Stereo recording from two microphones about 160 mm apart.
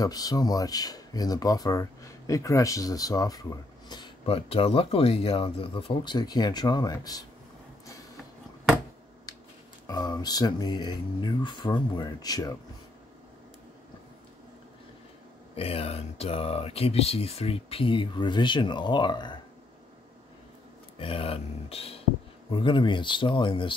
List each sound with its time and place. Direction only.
0.0 s speech: 20° left (ahead or behind)
4.3 s speech: 40° left (ahead or behind)
9.8 s speech: 25° left (ahead or behind)
15.5 s speech: 40° left (ahead or behind)
21.0 s speech: 35° left (ahead or behind)